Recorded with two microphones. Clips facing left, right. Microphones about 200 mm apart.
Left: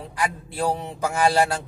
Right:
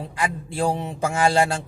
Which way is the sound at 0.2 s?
30° right (ahead or behind).